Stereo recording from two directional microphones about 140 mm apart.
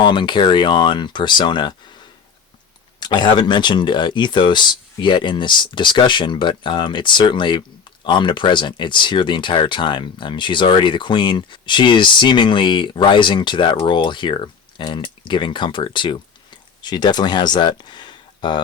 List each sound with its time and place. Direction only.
0.0 s speech: 35° left (ahead or behind)
3.0 s speech: 30° left (ahead or behind)